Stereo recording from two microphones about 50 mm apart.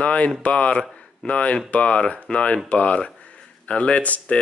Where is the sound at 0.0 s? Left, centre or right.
Left.